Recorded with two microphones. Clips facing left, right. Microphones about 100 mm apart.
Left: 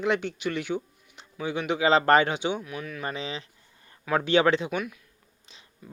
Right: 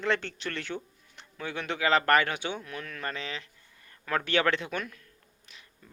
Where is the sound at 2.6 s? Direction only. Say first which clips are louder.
Left 3 dB; 5° left (ahead or behind).